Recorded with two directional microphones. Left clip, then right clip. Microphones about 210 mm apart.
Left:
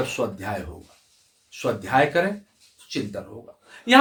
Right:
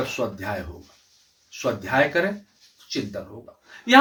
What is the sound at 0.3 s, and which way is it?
Speech, 15° left (ahead or behind).